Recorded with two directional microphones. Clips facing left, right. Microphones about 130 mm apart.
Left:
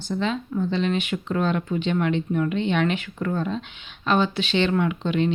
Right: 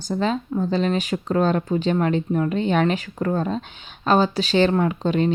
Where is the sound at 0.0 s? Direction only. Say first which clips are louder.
Right 3 dB; 40° right (ahead or behind).